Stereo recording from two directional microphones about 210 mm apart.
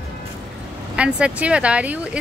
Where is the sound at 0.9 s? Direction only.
5° right (ahead or behind).